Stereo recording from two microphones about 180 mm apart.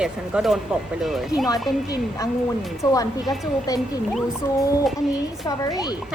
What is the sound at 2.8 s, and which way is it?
Speech, 20° left (ahead or behind).